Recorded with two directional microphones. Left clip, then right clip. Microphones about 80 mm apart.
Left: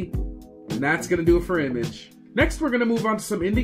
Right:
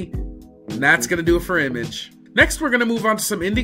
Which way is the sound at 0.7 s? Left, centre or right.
Centre.